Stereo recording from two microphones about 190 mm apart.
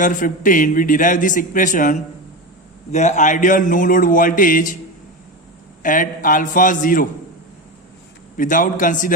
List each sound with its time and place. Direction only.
0.0 s a man's voice: 45° left (ahead or behind)
5.8 s a man's voice: 45° left (ahead or behind)
8.4 s a man's voice: 45° left (ahead or behind)